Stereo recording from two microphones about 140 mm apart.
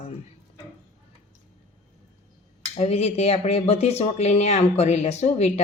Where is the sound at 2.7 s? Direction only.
50° left (ahead or behind).